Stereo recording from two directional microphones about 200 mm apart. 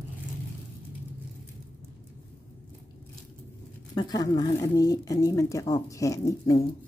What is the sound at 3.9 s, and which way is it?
Speech, 20° left (ahead or behind).